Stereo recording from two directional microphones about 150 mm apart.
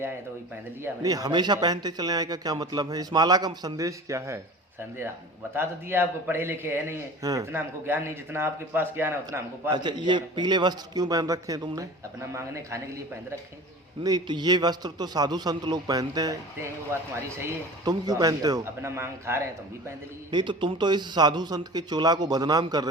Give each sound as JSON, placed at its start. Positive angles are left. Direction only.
{"t": 0.8, "sound": "a man's voice", "side_deg": -25}
{"t": 5.5, "sound": "a man's voice", "side_deg": -15}
{"t": 9.7, "sound": "a man's voice", "side_deg": -30}
{"t": 14.0, "sound": "a man's voice", "side_deg": -30}
{"t": 20.3, "sound": "a man's voice", "side_deg": -30}